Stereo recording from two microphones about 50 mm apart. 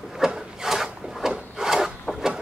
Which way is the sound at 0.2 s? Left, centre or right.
Centre.